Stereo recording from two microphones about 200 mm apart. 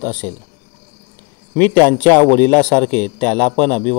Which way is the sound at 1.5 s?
10° left (ahead or behind).